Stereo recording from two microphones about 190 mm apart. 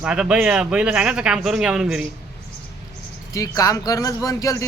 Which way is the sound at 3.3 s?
20° left (ahead or behind).